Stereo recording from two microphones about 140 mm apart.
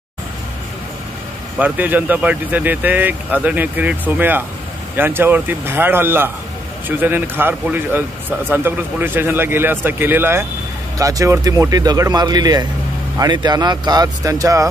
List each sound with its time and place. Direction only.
1.6 s speech: 10° right (ahead or behind)